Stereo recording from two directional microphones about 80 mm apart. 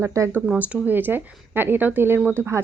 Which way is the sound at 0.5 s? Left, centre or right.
Right.